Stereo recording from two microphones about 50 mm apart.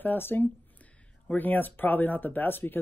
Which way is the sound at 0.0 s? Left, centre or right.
Left.